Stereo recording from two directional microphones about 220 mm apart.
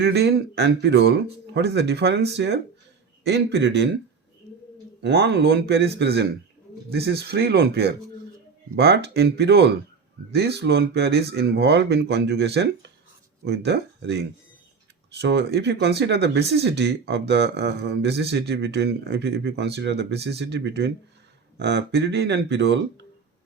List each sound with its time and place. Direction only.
0.0 s speech: 45° right (ahead or behind)
5.0 s speech: 50° right (ahead or behind)
15.2 s speech: 50° right (ahead or behind)